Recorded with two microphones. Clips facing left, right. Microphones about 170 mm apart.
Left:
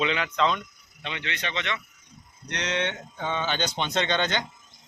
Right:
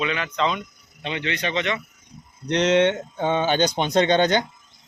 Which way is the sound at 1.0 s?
25° right (ahead or behind).